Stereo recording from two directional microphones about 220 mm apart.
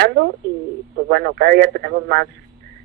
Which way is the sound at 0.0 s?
50° right (ahead or behind).